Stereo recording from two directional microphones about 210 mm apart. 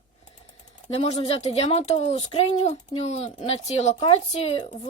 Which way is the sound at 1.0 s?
30° left (ahead or behind).